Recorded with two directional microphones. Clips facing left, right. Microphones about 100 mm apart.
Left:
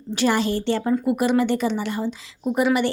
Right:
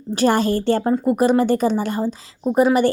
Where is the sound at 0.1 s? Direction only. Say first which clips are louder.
Right 4 dB; 40° right (ahead or behind).